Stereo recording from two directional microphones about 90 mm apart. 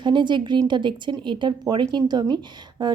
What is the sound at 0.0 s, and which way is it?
A woman's voice, 60° right (ahead or behind).